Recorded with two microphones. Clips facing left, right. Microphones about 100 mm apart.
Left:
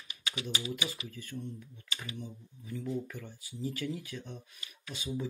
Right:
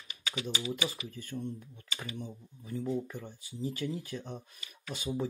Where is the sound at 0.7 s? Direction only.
30° right (ahead or behind).